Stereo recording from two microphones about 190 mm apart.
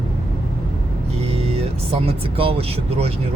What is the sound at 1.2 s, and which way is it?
Speech, 35° right (ahead or behind).